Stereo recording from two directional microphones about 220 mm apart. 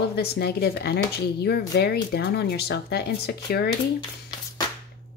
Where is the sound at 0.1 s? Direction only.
45° left (ahead or behind).